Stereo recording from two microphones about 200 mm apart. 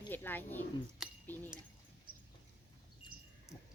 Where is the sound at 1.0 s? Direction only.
Centre (ahead or behind).